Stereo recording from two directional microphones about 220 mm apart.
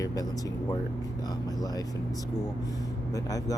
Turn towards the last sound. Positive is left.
turn(degrees=15)  # may be behind; listen again after turning